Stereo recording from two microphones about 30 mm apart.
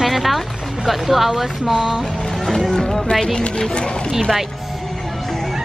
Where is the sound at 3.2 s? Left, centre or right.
Left.